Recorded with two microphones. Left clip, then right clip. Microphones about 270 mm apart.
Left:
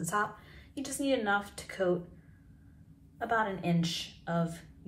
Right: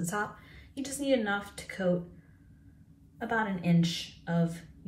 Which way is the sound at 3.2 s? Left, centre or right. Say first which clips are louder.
Left 1 dB; centre.